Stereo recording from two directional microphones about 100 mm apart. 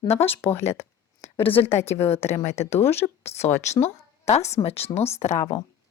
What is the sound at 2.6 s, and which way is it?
Speech, 25° left (ahead or behind).